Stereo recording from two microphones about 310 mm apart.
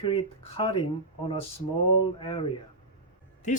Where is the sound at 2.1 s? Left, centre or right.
Centre.